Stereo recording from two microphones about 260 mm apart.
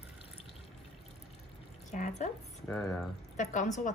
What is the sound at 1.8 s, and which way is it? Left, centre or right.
Speech, left.